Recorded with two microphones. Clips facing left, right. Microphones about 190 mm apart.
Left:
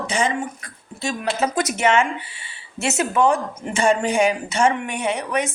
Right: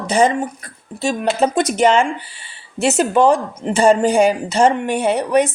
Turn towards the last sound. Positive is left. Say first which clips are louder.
# right 7 dB
turn(degrees=-35)  # may be behind; listen again after turning